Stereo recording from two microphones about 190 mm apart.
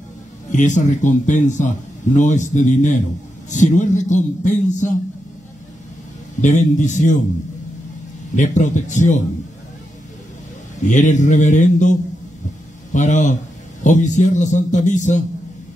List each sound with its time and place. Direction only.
0.5 s speech: 40° left (ahead or behind)
6.4 s speech: 40° left (ahead or behind)
8.4 s speech: 40° left (ahead or behind)
10.9 s speech: 40° left (ahead or behind)
12.9 s speech: 40° left (ahead or behind)